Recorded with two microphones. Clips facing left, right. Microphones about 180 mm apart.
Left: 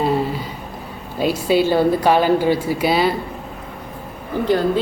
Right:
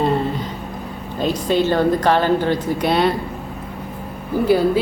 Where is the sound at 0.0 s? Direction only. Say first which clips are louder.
Even; 5° left (ahead or behind).